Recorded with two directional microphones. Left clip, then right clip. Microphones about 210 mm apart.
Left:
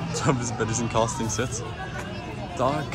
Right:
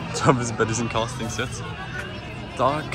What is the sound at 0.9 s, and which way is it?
Speech, 20° left (ahead or behind).